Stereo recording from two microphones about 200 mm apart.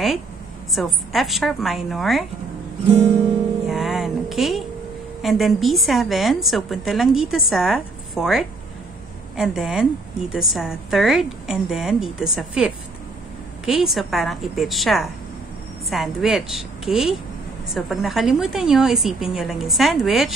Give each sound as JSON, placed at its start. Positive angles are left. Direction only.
{"t": 0.7, "sound": "a woman's voice", "side_deg": 0}
{"t": 2.9, "sound": "guitar", "side_deg": -30}
{"t": 3.6, "sound": "music", "side_deg": 0}
{"t": 5.2, "sound": "a woman's voice", "side_deg": 0}